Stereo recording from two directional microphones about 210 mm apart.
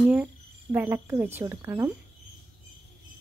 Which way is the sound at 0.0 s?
5° right (ahead or behind).